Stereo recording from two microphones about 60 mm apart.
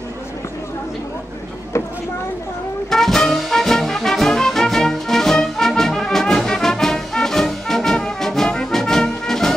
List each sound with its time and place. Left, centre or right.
2.9 s music: centre